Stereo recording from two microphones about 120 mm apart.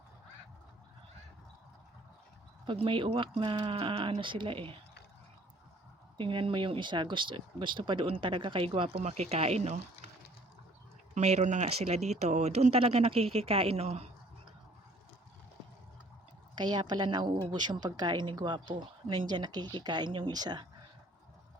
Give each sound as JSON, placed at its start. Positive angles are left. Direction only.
{"t": 2.6, "sound": "speech", "side_deg": -45}
{"t": 6.1, "sound": "speech", "side_deg": -45}
{"t": 11.1, "sound": "speech", "side_deg": -70}
{"t": 16.6, "sound": "speech", "side_deg": -40}